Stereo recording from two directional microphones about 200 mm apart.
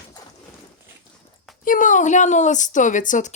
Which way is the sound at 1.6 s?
40° left (ahead or behind).